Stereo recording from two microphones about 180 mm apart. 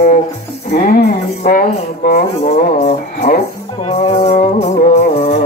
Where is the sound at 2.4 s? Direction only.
40° left (ahead or behind).